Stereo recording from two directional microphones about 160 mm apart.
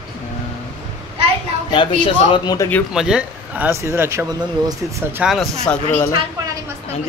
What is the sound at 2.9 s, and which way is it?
Speech, 5° right (ahead or behind).